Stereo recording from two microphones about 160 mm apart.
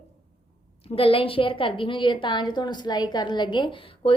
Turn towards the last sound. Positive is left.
turn(degrees=35)  # may be behind; listen again after turning